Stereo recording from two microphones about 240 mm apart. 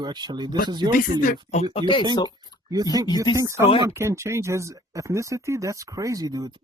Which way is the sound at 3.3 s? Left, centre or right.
Centre.